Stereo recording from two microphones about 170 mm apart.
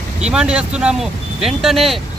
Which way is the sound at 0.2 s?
5° right (ahead or behind).